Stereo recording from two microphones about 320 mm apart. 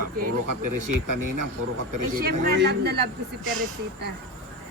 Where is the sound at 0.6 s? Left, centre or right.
Right.